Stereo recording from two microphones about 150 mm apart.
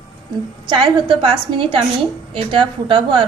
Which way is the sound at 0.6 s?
30° right (ahead or behind).